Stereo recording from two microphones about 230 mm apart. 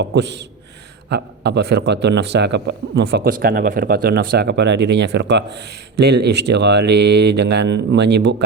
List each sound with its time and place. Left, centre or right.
0.0 s speech: right